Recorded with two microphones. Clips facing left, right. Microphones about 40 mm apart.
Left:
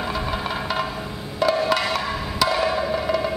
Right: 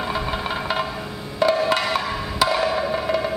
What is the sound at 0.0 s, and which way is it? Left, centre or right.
Music, centre.